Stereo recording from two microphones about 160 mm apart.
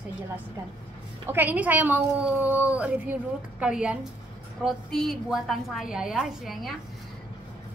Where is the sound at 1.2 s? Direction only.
10° right (ahead or behind).